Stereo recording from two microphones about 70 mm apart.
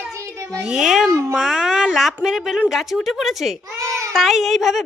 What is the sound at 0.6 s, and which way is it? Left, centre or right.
A child's voice, centre.